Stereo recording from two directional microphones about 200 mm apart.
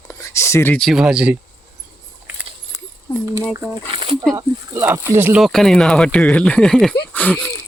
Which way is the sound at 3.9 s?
25° right (ahead or behind).